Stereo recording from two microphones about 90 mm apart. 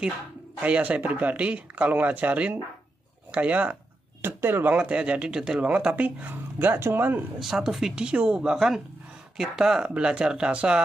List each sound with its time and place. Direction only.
0.6 s speech: 15° right (ahead or behind)
4.2 s speech: 25° right (ahead or behind)
4.7 s speech: 15° right (ahead or behind)
7.3 s speech: 5° right (ahead or behind)